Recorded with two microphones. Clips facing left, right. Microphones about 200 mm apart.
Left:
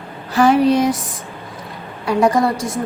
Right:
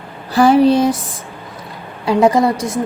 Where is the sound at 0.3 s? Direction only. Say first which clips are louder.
Right 3 dB; 30° right (ahead or behind).